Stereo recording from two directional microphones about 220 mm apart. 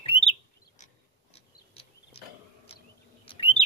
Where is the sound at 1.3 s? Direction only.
25° left (ahead or behind).